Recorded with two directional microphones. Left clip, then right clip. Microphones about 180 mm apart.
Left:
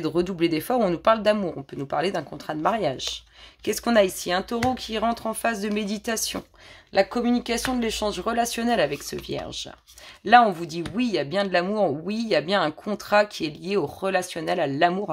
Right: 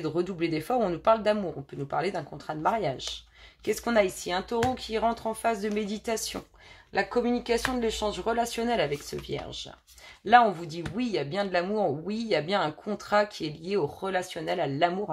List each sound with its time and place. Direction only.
0.0 s speech: 45° left (ahead or behind)